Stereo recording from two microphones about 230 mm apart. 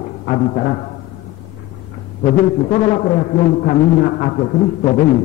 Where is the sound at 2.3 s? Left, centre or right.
Left.